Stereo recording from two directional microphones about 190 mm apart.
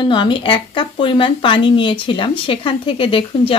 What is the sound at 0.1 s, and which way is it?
Speech, 25° left (ahead or behind).